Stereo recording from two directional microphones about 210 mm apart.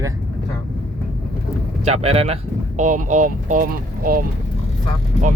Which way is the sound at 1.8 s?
30° right (ahead or behind).